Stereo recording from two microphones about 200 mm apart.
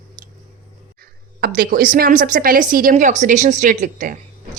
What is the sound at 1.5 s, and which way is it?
Speech, 45° right (ahead or behind).